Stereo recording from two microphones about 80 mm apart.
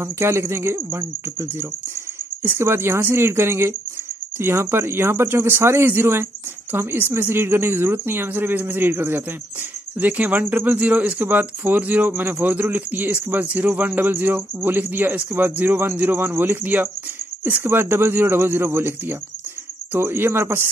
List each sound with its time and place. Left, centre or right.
0.0 s speech: right